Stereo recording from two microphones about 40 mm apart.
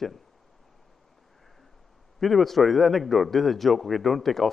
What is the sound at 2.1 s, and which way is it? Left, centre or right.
A man's voice, centre.